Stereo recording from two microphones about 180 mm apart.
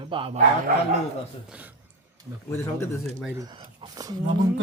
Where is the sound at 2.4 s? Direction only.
15° left (ahead or behind).